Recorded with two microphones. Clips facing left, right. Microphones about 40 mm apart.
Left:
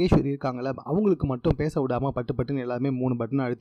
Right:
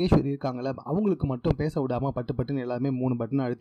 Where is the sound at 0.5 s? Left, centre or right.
Left.